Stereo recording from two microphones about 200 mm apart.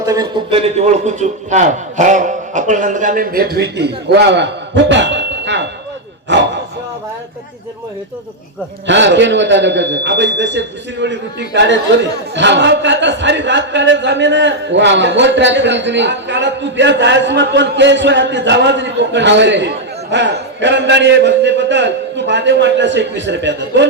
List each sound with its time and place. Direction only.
0.0 s a man's voice: 20° right (ahead or behind); by 6.5 s 65° right (ahead or behind)
8.9 s a man's voice: 60° right (ahead or behind)